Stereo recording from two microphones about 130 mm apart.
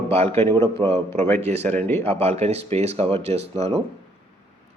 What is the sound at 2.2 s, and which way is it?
Speech, 55° right (ahead or behind).